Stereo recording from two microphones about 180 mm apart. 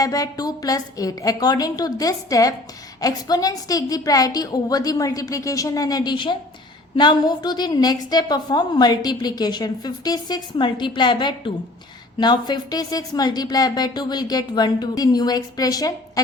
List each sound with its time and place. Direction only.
0.0 s a woman's voice: 20° left (ahead or behind)